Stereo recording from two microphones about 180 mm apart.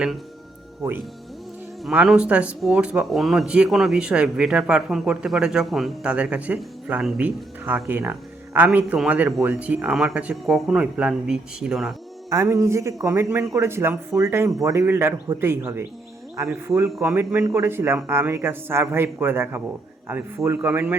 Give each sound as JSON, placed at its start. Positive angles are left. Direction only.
{"t": 0.8, "sound": "speech", "side_deg": -15}
{"t": 12.3, "sound": "speech", "side_deg": -15}